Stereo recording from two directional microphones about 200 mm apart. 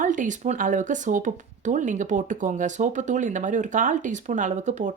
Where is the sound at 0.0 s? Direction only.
40° right (ahead or behind).